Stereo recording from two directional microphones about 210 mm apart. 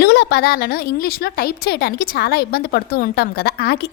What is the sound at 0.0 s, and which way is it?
A woman's voice, 55° left (ahead or behind).